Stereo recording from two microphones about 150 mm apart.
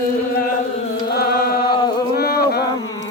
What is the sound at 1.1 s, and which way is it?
Chant, 90° left.